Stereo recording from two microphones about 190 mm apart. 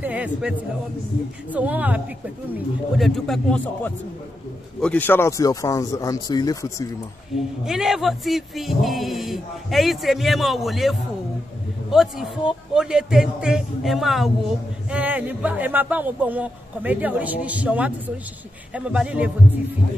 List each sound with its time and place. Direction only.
0.0 s a man's voice: 5° right (ahead or behind); by 6.9 s 15° left (ahead or behind)
7.3 s speech: centre (ahead or behind)